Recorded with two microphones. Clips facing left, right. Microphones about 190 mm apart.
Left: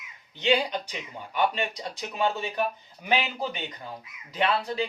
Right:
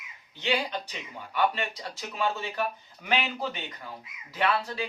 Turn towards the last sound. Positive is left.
turn(degrees=20)  # may be behind; listen again after turning